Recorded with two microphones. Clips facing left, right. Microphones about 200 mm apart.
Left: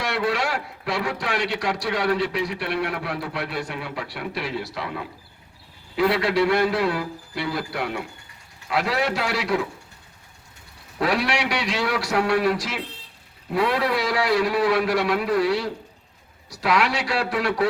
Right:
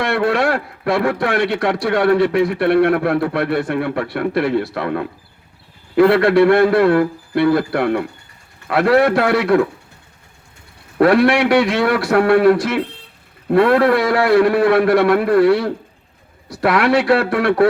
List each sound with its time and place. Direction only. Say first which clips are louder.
0.0 s a man's voice: right 8 dB; 55° right (ahead or behind)
10.9 s a man's voice: right 11 dB; 55° right (ahead or behind)